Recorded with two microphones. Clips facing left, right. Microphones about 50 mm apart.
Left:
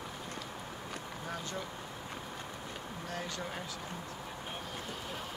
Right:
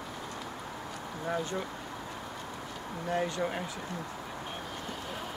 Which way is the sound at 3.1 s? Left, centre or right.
Right.